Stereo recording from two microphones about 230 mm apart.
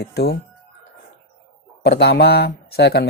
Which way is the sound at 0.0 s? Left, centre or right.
Left.